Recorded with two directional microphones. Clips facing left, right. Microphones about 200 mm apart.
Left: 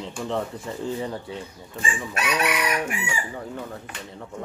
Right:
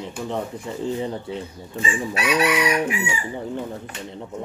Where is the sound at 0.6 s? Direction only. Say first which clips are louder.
Right 3 dB; 20° right (ahead or behind).